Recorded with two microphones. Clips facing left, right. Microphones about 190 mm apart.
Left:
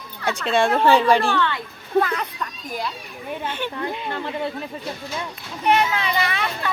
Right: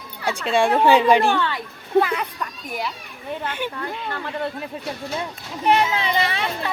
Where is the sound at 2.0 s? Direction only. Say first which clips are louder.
Right 2 dB; 10° right (ahead or behind).